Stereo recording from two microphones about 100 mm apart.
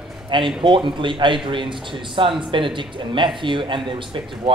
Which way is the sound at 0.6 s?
55° right (ahead or behind).